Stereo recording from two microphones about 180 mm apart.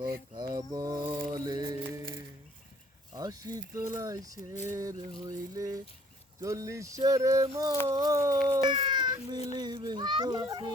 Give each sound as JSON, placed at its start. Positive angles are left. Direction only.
{"t": 0.3, "sound": "a sound", "side_deg": -20}
{"t": 1.3, "sound": "music", "side_deg": -25}
{"t": 3.2, "sound": "speech", "side_deg": -20}